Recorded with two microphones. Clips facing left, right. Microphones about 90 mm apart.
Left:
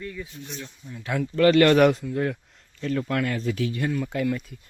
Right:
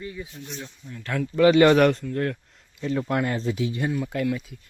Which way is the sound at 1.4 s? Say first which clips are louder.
Right 1 dB; 10° right (ahead or behind).